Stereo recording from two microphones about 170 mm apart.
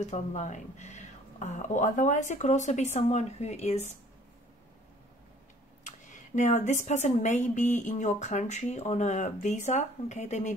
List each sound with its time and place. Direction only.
0.0 s speech: 45° left (ahead or behind)
5.9 s speech: 45° left (ahead or behind)